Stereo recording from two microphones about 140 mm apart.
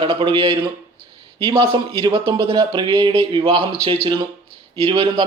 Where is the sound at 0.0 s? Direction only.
40° right (ahead or behind).